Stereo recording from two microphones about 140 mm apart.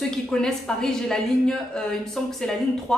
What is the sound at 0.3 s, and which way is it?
A woman's voice, 5° left (ahead or behind).